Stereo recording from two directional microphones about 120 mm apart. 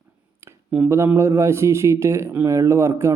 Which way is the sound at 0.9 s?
25° right (ahead or behind).